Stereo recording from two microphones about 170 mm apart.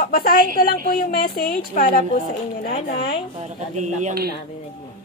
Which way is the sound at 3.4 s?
45° right (ahead or behind).